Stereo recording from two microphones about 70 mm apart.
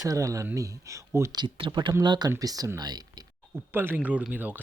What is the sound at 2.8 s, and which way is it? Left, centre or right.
Speech, right.